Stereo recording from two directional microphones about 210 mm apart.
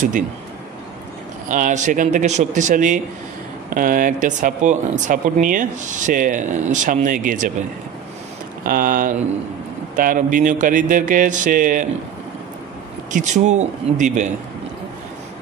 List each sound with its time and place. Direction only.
1.5 s speech: 35° right (ahead or behind)
8.6 s speech: 45° right (ahead or behind)
13.1 s speech: 35° right (ahead or behind)